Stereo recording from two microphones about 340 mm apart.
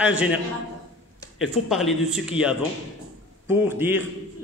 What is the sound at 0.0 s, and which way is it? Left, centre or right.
Speech, centre.